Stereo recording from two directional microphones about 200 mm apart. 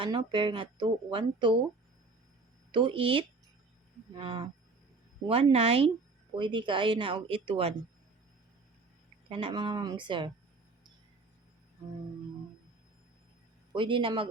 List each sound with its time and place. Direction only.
0.0 s speech: 25° right (ahead or behind)
2.7 s speech: 25° right (ahead or behind)
9.3 s speech: 25° right (ahead or behind)
13.7 s speech: 25° right (ahead or behind)